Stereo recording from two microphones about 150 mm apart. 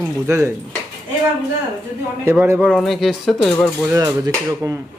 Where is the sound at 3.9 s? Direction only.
25° right (ahead or behind).